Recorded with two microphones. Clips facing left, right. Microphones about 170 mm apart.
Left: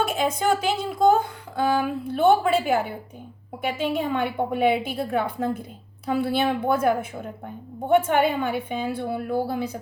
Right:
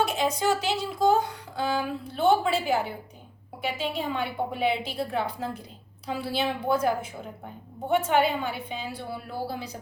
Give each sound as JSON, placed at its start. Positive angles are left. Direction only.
{"t": 0.0, "sound": "a woman's voice", "side_deg": 50}